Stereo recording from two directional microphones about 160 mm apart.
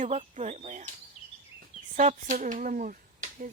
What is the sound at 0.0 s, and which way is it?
Speech, 50° right (ahead or behind).